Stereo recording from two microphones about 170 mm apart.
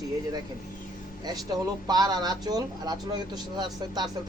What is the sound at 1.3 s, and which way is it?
Speech, 25° right (ahead or behind).